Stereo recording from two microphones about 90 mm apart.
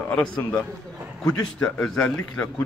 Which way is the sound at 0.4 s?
15° left (ahead or behind).